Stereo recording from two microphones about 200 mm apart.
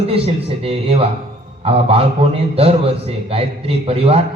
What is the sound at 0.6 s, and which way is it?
A man's voice, 30° right (ahead or behind).